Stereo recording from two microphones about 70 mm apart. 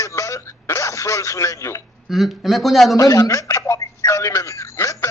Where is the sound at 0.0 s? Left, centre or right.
Left.